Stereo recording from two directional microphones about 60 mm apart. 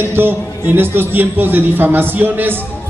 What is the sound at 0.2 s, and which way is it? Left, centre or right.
A man's voice, right.